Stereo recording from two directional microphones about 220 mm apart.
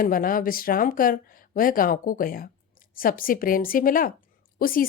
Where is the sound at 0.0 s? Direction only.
40° left (ahead or behind).